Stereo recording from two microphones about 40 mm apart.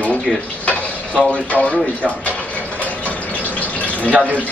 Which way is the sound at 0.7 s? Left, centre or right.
Left.